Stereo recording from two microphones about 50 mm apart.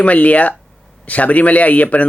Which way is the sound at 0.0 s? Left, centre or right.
Left.